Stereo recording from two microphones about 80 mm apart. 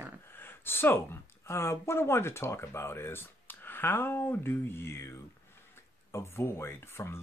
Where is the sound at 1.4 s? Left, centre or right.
Left.